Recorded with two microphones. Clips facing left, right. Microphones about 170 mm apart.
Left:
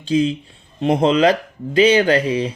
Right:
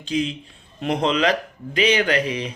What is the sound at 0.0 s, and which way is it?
Speech, 30° left (ahead or behind).